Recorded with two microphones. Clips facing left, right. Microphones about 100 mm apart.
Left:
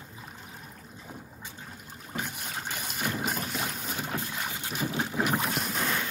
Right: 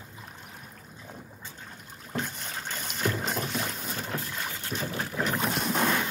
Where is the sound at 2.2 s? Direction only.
10° left (ahead or behind).